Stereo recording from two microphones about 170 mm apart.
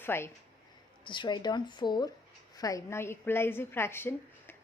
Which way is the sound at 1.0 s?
25° left (ahead or behind).